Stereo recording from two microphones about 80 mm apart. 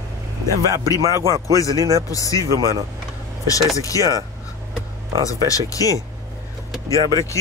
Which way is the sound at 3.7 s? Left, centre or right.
Left.